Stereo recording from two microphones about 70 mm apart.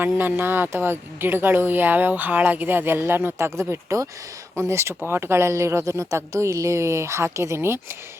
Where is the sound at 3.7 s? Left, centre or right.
Right.